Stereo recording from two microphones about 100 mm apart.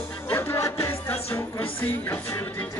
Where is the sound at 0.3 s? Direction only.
25° left (ahead or behind).